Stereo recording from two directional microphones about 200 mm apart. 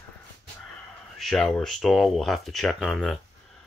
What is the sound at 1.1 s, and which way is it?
Speech, centre (ahead or behind).